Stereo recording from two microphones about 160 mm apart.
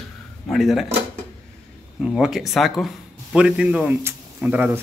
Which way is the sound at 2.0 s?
5° right (ahead or behind).